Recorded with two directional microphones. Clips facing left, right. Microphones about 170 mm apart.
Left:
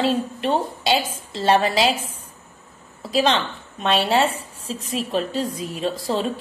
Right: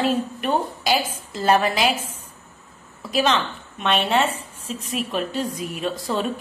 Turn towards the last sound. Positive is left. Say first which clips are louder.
# left 1 dB
turn(degrees=30)  # may be behind; listen again after turning